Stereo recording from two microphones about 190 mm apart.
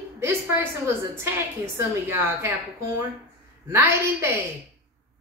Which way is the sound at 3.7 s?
10° right (ahead or behind).